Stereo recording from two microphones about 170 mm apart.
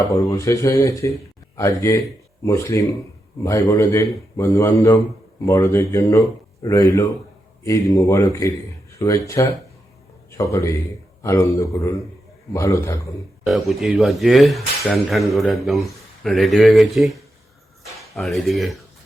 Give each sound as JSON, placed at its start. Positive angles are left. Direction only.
{"t": 0.0, "sound": "speech", "side_deg": 20}
{"t": 13.5, "sound": "speech", "side_deg": 0}
{"t": 18.2, "sound": "speech", "side_deg": 0}